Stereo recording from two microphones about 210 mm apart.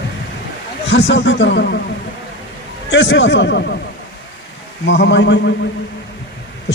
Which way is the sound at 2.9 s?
60° left (ahead or behind).